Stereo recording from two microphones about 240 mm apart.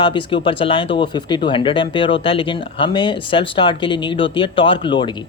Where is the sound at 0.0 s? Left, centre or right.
Left.